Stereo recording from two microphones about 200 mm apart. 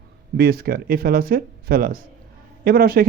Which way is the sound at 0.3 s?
50° right (ahead or behind).